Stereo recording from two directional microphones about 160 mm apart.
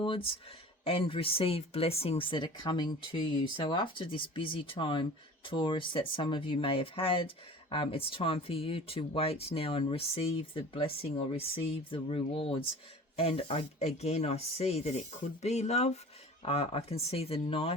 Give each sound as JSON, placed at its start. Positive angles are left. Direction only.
{"t": 0.0, "sound": "speech", "side_deg": 35}